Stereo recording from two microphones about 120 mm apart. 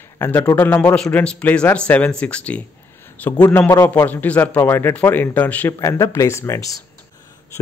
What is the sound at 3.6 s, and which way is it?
Speech, 30° left (ahead or behind).